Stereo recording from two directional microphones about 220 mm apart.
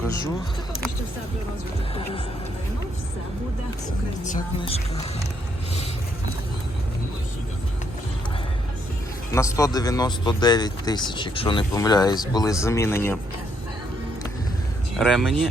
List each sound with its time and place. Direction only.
4.2 s speech: 30° left (ahead or behind)
9.3 s speech: 15° left (ahead or behind)
14.9 s speech: centre (ahead or behind)